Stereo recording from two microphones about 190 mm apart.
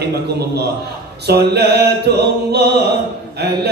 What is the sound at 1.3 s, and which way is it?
A man's voice, 60° right (ahead or behind).